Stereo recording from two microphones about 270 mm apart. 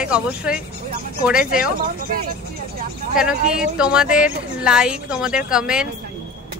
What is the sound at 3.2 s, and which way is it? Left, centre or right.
Speech, centre.